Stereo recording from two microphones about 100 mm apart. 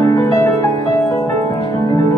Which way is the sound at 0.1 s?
35° left (ahead or behind).